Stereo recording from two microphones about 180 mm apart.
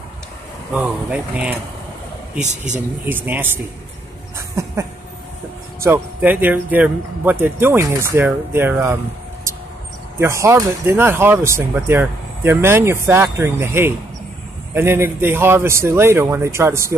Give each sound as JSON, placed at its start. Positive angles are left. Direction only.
{"t": 0.7, "sound": "speech", "side_deg": -10}
{"t": 2.4, "sound": "speech", "side_deg": -40}
{"t": 3.1, "sound": "speech", "side_deg": -10}
{"t": 5.8, "sound": "speech", "side_deg": -15}
{"t": 10.1, "sound": "speech", "side_deg": -15}